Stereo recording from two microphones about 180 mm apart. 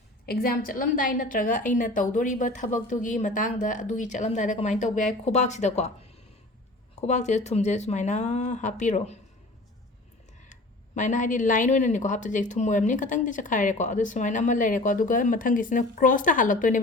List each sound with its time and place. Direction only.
0.3 s speech: 55° left (ahead or behind); by 5.9 s 40° left (ahead or behind)
7.0 s speech: 40° left (ahead or behind)
10.5 s speech: 45° left (ahead or behind)